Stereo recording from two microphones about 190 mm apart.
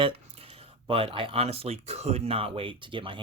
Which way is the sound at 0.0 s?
30° right (ahead or behind).